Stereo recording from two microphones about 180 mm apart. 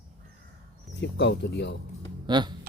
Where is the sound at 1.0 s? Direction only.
75° left (ahead or behind).